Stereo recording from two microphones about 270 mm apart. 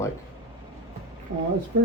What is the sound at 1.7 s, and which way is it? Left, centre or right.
Speech, right.